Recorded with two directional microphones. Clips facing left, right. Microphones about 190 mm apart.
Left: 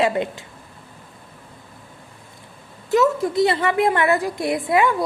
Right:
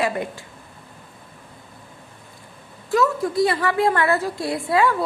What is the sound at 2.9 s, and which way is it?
A woman's voice, 20° left (ahead or behind).